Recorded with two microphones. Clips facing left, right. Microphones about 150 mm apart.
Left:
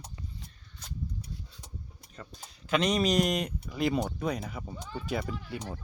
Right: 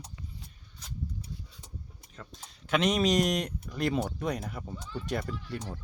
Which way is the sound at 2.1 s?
Centre (ahead or behind).